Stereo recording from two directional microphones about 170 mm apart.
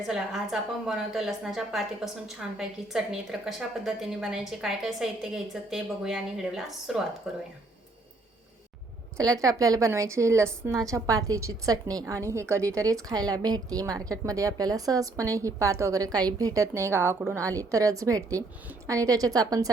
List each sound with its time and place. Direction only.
0.0 s a woman's voice: centre (ahead or behind)
9.1 s a woman's voice: 20° right (ahead or behind)